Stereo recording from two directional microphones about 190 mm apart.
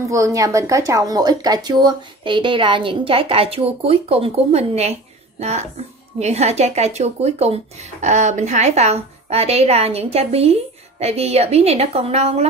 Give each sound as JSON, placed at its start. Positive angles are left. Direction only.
{"t": 0.0, "sound": "speech", "side_deg": -15}